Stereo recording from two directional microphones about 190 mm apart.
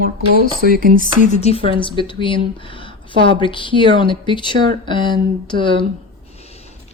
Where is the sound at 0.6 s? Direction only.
50° right (ahead or behind).